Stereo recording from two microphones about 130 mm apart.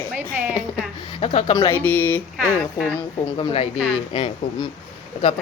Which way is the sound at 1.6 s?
15° left (ahead or behind).